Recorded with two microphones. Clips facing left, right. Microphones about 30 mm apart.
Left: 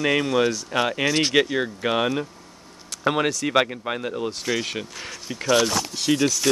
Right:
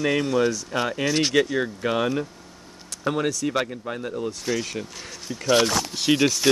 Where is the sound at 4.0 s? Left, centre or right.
Left.